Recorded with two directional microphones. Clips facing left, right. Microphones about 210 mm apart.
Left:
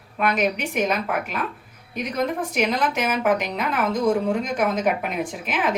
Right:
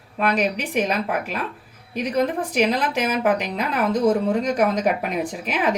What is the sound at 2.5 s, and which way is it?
A woman's voice, 35° right (ahead or behind).